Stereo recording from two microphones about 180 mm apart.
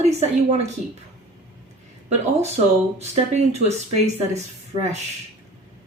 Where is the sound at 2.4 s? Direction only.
35° right (ahead or behind).